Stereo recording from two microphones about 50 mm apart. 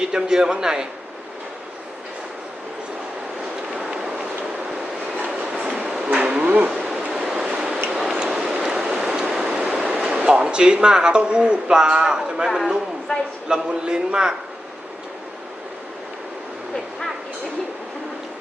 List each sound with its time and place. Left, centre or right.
0.1 s a man's voice: centre
5.1 s train: right
6.1 s a sound: right
7.1 s train: centre
7.9 s tick-tock: centre
8.3 s train: centre
12.5 s a man's voice: centre